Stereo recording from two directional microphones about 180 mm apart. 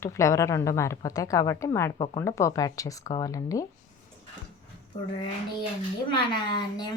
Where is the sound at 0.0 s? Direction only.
15° left (ahead or behind).